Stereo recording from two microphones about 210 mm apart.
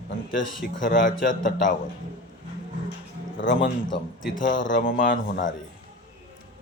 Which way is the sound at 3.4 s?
60° left (ahead or behind).